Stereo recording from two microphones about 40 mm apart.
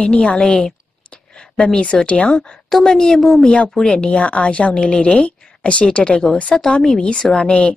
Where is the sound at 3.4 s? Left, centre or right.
Left.